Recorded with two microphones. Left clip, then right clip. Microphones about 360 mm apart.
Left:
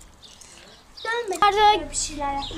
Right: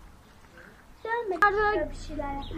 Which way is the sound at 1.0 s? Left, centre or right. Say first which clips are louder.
Left 4 dB; left.